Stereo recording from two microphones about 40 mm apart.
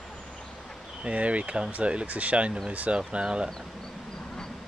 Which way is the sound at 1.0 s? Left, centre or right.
Right.